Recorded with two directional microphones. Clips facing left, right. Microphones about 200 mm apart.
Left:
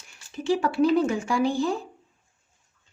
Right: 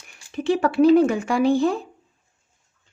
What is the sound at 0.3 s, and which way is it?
Speech, 60° right (ahead or behind).